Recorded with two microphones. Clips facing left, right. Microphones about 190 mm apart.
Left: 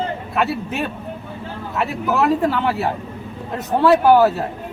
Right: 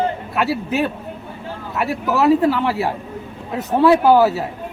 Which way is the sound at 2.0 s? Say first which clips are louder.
Right 3 dB; centre (ahead or behind).